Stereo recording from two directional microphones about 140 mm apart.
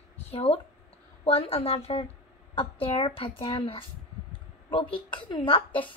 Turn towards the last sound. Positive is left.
turn(degrees=40)  # may be behind; listen again after turning